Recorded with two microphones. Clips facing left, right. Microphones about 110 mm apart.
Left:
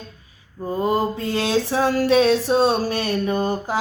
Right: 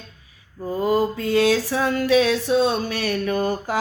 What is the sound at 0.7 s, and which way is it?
Mantra, 25° left (ahead or behind).